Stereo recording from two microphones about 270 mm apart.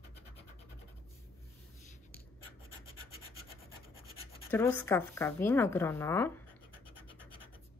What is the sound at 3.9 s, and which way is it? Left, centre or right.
Scratch, left.